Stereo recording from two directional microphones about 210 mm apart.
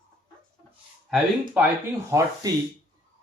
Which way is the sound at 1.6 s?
5° right (ahead or behind).